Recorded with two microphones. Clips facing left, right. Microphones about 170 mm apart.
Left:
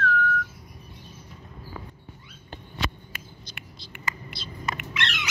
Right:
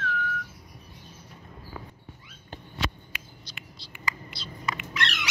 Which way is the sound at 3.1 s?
50° left (ahead or behind).